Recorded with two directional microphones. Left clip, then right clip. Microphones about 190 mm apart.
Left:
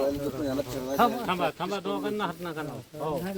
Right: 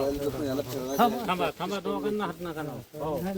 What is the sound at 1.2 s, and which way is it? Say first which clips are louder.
Speech: even; 50° left (ahead or behind).